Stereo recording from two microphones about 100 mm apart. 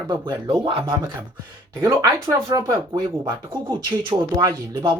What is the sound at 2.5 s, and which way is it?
Speech, 50° right (ahead or behind).